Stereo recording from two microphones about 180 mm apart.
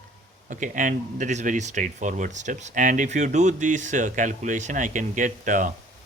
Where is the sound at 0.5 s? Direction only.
45° right (ahead or behind).